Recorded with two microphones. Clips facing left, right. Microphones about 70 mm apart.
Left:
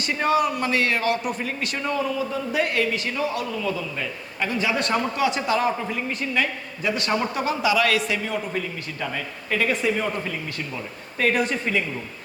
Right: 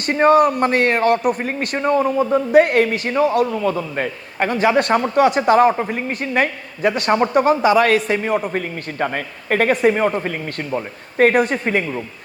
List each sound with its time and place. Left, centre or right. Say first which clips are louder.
0.0 s a man's voice: right 8 dB; right